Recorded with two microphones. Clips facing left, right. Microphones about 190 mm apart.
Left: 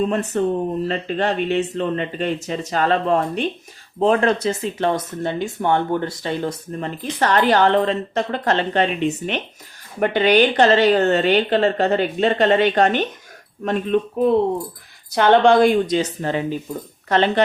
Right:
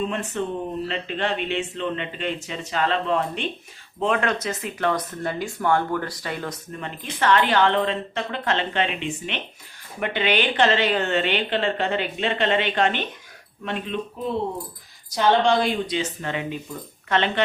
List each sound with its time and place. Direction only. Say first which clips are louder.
0.0 s a woman's voice: left 7 dB; 40° left (ahead or behind)
15.1 s a woman's voice: left 6 dB; 60° left (ahead or behind); by 17.4 s 40° left (ahead or behind)